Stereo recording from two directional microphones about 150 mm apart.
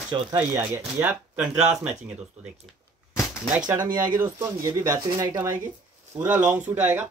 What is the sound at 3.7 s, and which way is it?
Speech, 25° right (ahead or behind).